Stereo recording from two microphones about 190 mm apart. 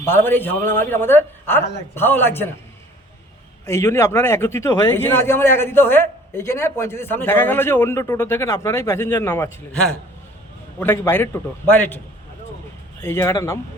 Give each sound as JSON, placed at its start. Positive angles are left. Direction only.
{"t": 0.0, "sound": "speech", "side_deg": 10}
{"t": 3.7, "sound": "speech", "side_deg": 15}
{"t": 13.0, "sound": "speech", "side_deg": 15}